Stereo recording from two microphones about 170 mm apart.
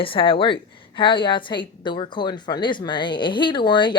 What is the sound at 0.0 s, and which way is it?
A woman's voice, 30° left (ahead or behind).